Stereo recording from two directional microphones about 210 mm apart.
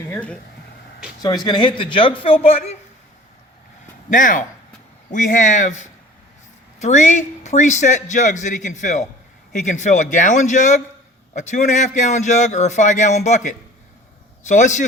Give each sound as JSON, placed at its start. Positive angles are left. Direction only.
{"t": 0.1, "sound": "speech", "side_deg": 5}
{"t": 1.5, "sound": "a man's voice", "side_deg": 25}
{"t": 4.1, "sound": "a man's voice", "side_deg": 40}
{"t": 6.8, "sound": "a man's voice", "side_deg": 35}